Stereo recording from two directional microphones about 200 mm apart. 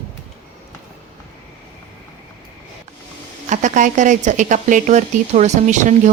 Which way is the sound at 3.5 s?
40° right (ahead or behind).